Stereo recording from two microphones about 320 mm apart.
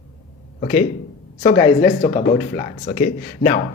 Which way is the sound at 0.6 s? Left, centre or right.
Left.